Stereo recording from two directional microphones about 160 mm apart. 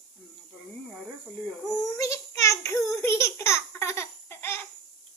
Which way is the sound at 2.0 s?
20° left (ahead or behind).